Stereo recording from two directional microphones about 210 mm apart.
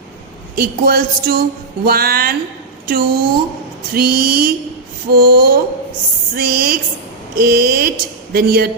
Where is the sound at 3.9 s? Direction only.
45° right (ahead or behind).